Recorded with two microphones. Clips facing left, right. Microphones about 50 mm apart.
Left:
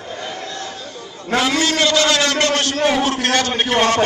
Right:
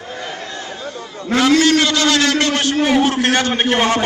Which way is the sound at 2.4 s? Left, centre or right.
Centre.